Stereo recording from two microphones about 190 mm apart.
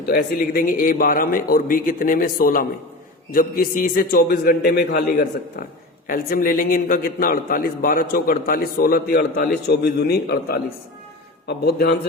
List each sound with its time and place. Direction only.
0.0 s a man's voice: 55° left (ahead or behind)